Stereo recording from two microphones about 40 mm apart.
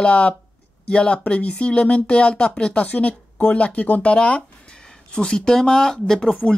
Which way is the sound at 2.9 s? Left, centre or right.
Left.